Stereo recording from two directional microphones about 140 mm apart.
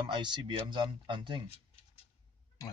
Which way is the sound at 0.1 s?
35° right (ahead or behind).